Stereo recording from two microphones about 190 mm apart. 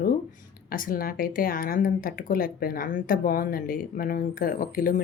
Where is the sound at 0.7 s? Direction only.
50° left (ahead or behind).